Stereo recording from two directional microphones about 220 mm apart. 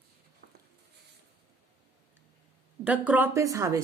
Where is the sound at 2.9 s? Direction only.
5° right (ahead or behind).